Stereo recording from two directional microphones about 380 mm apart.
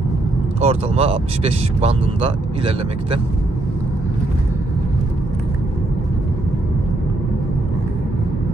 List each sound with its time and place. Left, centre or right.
0.6 s speech: centre